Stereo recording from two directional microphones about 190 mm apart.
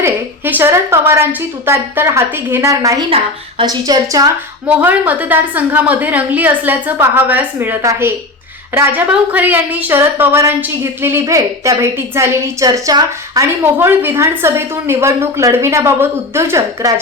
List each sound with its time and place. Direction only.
0.0 s a woman's voice: 10° right (ahead or behind)
4.6 s a woman's voice: 10° right (ahead or behind)